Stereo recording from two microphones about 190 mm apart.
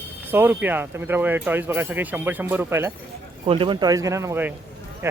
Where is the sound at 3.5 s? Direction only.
25° right (ahead or behind).